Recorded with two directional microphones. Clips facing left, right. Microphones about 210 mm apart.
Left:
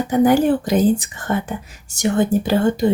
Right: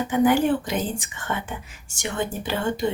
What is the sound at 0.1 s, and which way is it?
Speech, 40° left (ahead or behind).